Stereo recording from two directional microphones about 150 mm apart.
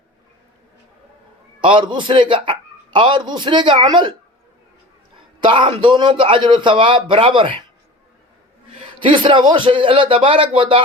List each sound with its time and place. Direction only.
1.6 s a man's voice: 35° right (ahead or behind)
5.4 s a man's voice: 35° right (ahead or behind)
8.8 s a man's voice: 35° right (ahead or behind)